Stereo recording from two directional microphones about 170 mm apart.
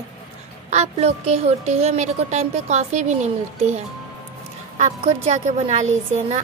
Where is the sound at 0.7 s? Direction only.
40° right (ahead or behind).